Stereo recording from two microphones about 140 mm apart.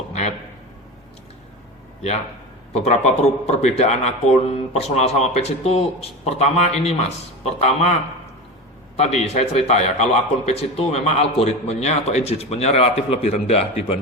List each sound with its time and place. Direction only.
0.1 s a sound: 50° left (ahead or behind)
2.7 s a man's voice: 50° left (ahead or behind)
9.0 s a man's voice: 50° left (ahead or behind)